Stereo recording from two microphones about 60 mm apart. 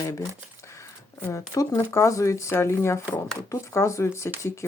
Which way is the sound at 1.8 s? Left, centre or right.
Left.